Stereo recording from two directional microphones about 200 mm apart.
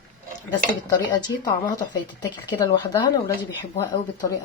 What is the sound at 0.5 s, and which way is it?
Speech, 20° left (ahead or behind).